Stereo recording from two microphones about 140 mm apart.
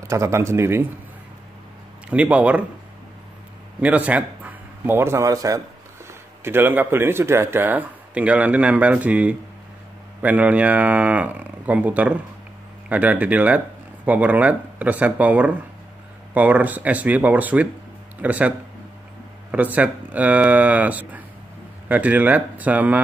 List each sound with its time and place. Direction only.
0.1 s speech: 20° right (ahead or behind)
2.0 s speech: 10° right (ahead or behind)
3.8 s a man's voice: 10° right (ahead or behind)
19.5 s speech: 10° right (ahead or behind)